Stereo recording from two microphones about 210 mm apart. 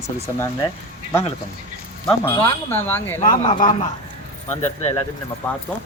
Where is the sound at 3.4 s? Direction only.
25° left (ahead or behind).